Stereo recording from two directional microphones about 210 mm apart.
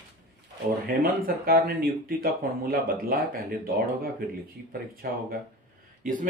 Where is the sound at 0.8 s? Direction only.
45° right (ahead or behind).